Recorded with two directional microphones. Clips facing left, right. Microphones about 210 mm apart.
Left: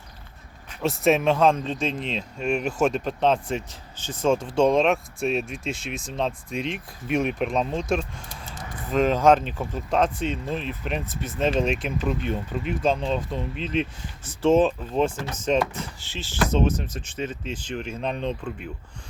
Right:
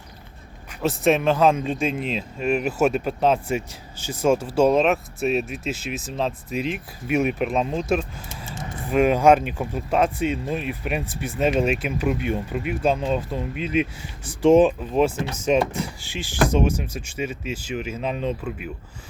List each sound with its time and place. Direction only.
0.7 s speech: centre (ahead or behind)
8.4 s vehicle: 25° right (ahead or behind)
8.9 s speech: 10° right (ahead or behind)